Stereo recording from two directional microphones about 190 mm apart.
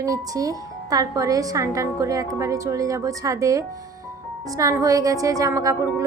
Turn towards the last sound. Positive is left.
turn(degrees=-15)  # may be behind; listen again after turning